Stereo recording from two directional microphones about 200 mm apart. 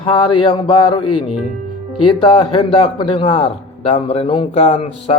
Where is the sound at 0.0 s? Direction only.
25° left (ahead or behind).